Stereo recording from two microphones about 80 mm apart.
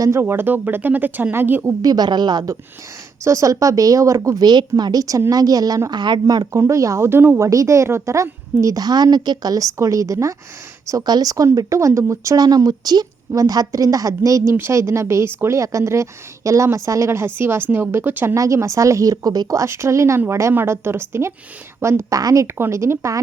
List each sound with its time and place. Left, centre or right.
0.0 s speech: right
1.8 s a woman's voice: right
3.2 s speech: right
10.8 s speech: right
14.5 s a woman's voice: right
18.3 s a woman's voice: right
19.1 s a woman's voice: right
22.2 s speech: right
22.5 s a woman's voice: right